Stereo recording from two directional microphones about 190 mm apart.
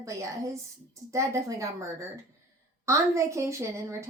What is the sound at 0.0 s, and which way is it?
A woman's voice, 15° right (ahead or behind).